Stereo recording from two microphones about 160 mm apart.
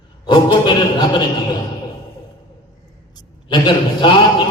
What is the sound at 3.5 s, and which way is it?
Speech, 30° left (ahead or behind).